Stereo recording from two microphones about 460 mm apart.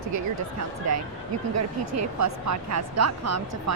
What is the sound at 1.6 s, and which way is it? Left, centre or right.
Speech, right.